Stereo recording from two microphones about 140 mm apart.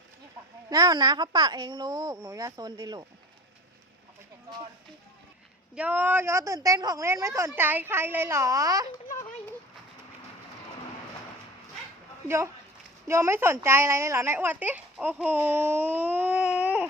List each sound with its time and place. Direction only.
0.7 s speech: 30° right (ahead or behind)
5.7 s speech: 10° right (ahead or behind)
13.1 s speech: 20° right (ahead or behind)